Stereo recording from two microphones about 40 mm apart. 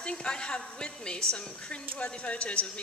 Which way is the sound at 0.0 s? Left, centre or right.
Left.